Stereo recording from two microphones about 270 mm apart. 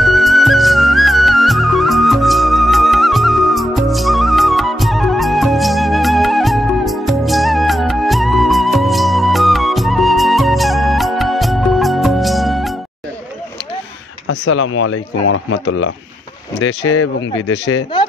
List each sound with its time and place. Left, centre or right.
0.0 s music: centre
14.2 s speech: left